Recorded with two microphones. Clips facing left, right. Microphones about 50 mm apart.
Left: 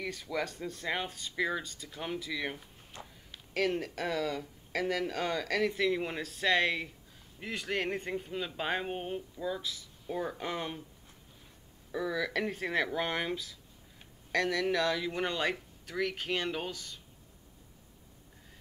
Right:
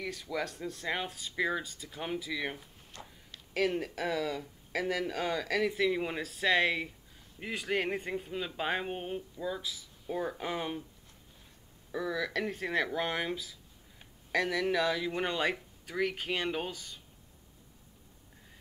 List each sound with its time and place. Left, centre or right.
0.0 s speech: centre
2.9 s speech: left
3.5 s speech: centre
11.9 s speech: centre